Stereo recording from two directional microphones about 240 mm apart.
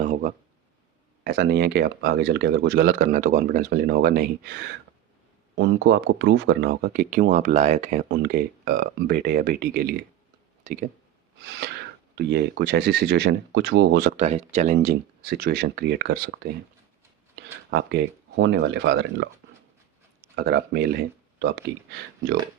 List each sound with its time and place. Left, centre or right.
0.0 s a sound: right
1.2 s speech: right
5.5 s speech: right
12.1 s speech: right
20.3 s speech: right